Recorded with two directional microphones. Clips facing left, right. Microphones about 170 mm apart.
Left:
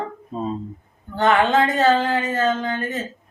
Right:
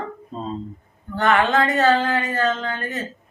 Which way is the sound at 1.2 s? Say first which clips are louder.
Left 1 dB; 20° left (ahead or behind).